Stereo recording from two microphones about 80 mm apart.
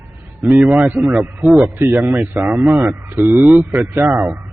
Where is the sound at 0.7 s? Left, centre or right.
Right.